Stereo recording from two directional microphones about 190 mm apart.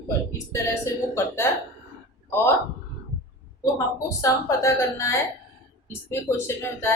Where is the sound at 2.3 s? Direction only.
10° left (ahead or behind).